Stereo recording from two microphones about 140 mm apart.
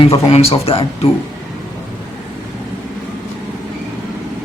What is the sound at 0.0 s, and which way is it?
Speech, 45° left (ahead or behind).